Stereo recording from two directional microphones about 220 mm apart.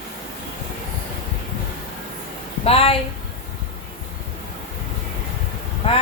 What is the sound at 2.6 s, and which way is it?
Speech, 25° left (ahead or behind).